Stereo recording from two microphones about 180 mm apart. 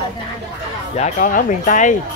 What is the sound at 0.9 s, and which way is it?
Speech, 45° left (ahead or behind).